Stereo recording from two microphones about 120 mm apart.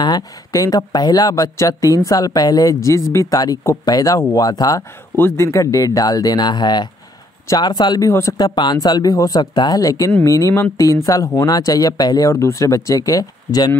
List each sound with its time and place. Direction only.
0.0 s speech: 30° left (ahead or behind)
5.1 s speech: 20° left (ahead or behind); by 8.1 s 35° left (ahead or behind)
8.1 s speech: 25° left (ahead or behind)
8.4 s speech: 35° left (ahead or behind)